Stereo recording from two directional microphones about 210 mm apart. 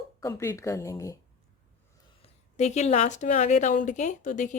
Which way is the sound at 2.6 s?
30° left (ahead or behind).